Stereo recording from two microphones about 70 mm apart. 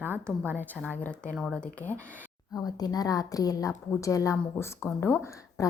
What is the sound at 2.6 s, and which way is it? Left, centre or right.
A woman's voice, left.